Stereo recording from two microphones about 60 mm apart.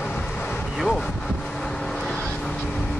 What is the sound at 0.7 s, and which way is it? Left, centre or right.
Vehicle, centre.